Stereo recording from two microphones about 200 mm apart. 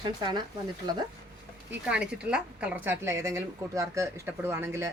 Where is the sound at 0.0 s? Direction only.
20° right (ahead or behind).